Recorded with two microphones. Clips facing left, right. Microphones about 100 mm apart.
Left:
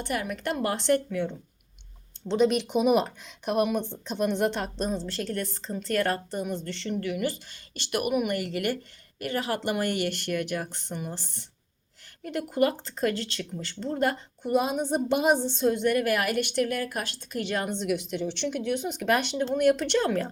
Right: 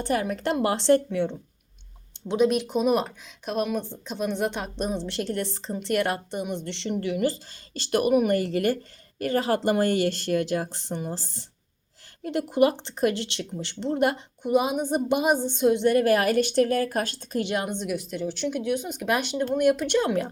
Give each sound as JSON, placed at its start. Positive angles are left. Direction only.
{"t": 0.0, "sound": "speech", "side_deg": -30}
{"t": 2.2, "sound": "speech", "side_deg": -5}
{"t": 4.9, "sound": "speech", "side_deg": -20}
{"t": 6.7, "sound": "speech", "side_deg": -25}
{"t": 14.5, "sound": "speech", "side_deg": -10}
{"t": 15.8, "sound": "speech", "side_deg": -30}
{"t": 17.5, "sound": "speech", "side_deg": -15}
{"t": 17.8, "sound": "speech", "side_deg": 0}